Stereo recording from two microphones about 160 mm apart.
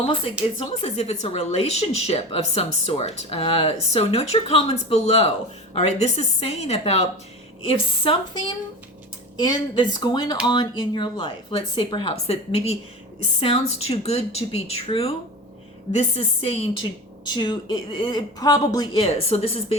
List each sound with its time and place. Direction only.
0.8 s speech: 40° left (ahead or behind); by 19.0 s 25° left (ahead or behind)
19.0 s speech: 40° left (ahead or behind)